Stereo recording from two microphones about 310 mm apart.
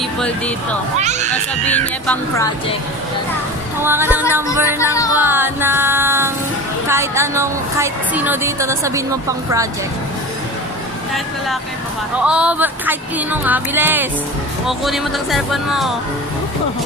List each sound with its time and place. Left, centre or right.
0.9 s speech: right
1.7 s speech: centre
3.8 s a woman's voice: centre
4.7 s music: centre
5.2 s a woman's voice: centre
12.2 s speech: centre